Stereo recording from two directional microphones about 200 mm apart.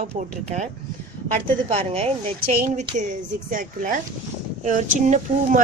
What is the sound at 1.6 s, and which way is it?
A woman's voice, 30° right (ahead or behind).